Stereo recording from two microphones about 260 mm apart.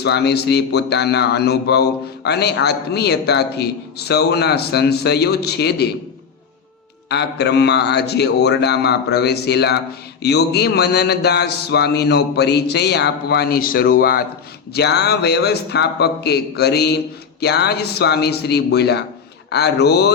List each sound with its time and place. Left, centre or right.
0.0 s speech: left
7.1 s speech: left